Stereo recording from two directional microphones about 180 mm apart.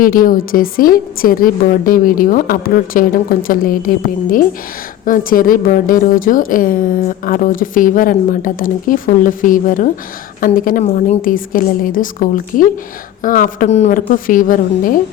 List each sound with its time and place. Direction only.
0.0 s a woman's voice: 50° left (ahead or behind)